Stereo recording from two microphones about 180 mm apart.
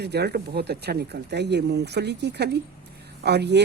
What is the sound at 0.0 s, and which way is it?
Speech, 65° right (ahead or behind).